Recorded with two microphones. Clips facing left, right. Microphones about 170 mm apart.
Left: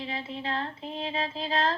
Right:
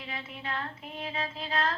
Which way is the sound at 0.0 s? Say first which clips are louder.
Left 6 dB; 30° left (ahead or behind).